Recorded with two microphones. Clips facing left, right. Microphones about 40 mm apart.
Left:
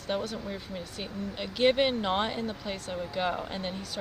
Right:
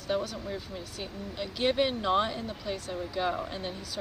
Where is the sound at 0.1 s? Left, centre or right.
Centre.